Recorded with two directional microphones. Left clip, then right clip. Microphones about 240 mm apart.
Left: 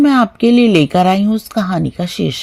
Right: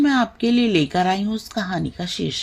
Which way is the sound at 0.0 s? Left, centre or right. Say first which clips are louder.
Left 7 dB; left.